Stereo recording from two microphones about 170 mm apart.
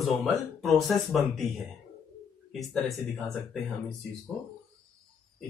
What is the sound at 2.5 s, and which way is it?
Speech, centre (ahead or behind).